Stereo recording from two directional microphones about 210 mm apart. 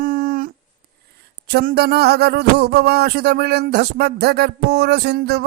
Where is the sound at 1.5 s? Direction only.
50° right (ahead or behind).